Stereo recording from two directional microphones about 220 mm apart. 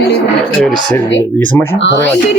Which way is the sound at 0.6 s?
5° left (ahead or behind).